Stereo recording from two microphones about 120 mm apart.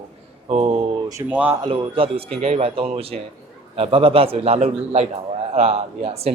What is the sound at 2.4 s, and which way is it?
A man's voice, 60° right (ahead or behind).